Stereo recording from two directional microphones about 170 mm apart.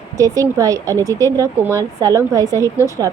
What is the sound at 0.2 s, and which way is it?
A woman's voice, 20° right (ahead or behind).